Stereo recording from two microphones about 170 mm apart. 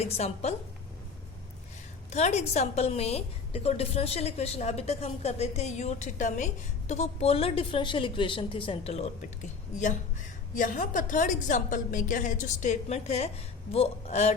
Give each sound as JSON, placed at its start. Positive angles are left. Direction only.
{"t": 0.0, "sound": "a woman's voice", "side_deg": 40}
{"t": 2.0, "sound": "a woman's voice", "side_deg": 40}